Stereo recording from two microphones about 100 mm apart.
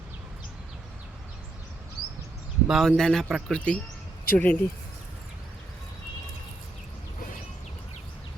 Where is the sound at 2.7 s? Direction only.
Centre (ahead or behind); by 4.6 s 15° left (ahead or behind).